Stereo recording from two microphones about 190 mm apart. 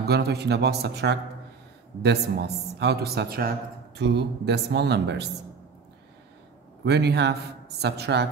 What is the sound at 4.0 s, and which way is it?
A man's voice, 65° right (ahead or behind).